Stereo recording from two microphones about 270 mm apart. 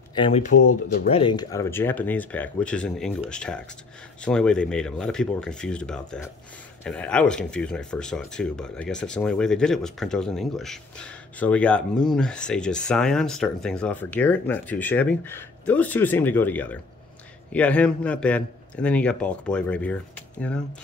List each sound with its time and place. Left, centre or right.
0.1 s speech: centre